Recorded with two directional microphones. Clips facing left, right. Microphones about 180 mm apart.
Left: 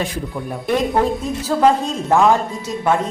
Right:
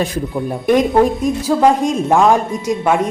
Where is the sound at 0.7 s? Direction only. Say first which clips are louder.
Right 5 dB; 15° right (ahead or behind).